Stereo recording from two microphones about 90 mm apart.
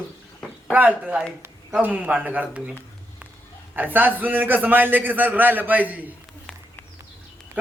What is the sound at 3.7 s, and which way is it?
A man's voice, 20° right (ahead or behind).